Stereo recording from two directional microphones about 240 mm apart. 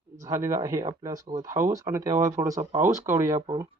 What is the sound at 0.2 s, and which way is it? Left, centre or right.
Speech, centre.